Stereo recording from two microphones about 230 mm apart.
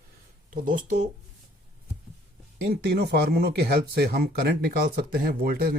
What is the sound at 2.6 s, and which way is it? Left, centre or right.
Speech, right.